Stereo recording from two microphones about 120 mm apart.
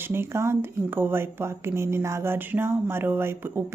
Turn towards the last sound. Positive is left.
turn(degrees=-20)  # may be behind; listen again after turning